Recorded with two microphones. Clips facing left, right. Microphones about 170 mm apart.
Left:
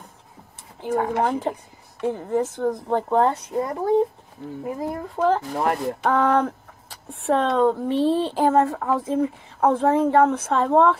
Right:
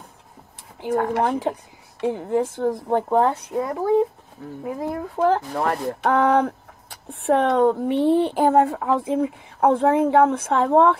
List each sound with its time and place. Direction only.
0.9 s speech: 10° left (ahead or behind)
2.0 s speech: 10° right (ahead or behind)
3.2 s speech: centre (ahead or behind)
5.5 s speech: 10° left (ahead or behind)
6.0 s speech: 15° right (ahead or behind)
7.5 s speech: 15° right (ahead or behind)